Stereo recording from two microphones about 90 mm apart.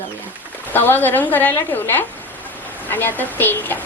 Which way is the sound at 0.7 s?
20° left (ahead or behind).